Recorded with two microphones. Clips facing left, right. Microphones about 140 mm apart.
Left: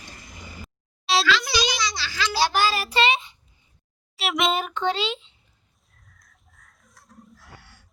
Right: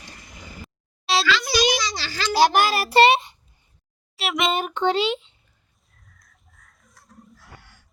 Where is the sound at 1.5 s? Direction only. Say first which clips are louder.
Right 4 dB; 50° right (ahead or behind).